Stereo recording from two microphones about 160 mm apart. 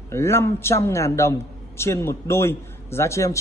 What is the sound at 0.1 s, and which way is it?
A man's voice, 15° left (ahead or behind).